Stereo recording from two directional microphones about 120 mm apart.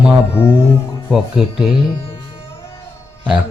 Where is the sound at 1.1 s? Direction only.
5° right (ahead or behind).